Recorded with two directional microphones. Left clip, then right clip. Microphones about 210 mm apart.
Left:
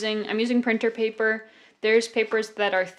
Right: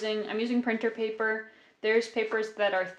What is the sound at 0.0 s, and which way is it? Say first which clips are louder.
Speech: left 5 dB; 55° left (ahead or behind).